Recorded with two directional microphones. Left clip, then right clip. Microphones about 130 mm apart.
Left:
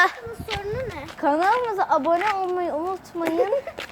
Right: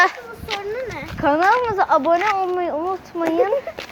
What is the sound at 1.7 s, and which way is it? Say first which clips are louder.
A woman's voice: right 4 dB; 5° right (ahead or behind).